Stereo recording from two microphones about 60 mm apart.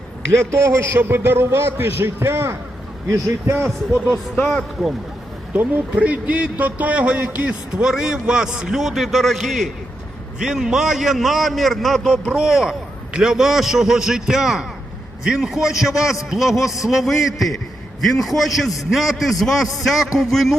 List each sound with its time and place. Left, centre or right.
0.3 s a man's voice: right
5.5 s speech: right
7.9 s a man's voice: centre
12.1 s a man's voice: centre